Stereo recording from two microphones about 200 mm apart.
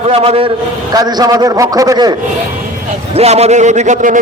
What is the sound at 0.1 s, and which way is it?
A man's voice, 30° right (ahead or behind).